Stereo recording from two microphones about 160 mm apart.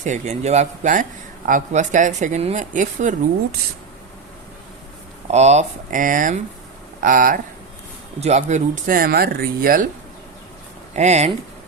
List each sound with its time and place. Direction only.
0.0 s speech: 50° right (ahead or behind)
5.3 s speech: 45° right (ahead or behind); by 7.3 s 60° right (ahead or behind)
8.2 s speech: 45° right (ahead or behind); by 9.9 s 60° right (ahead or behind)
10.9 s speech: 45° right (ahead or behind)